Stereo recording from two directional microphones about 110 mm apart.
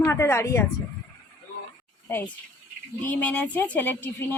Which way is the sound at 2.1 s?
20° left (ahead or behind).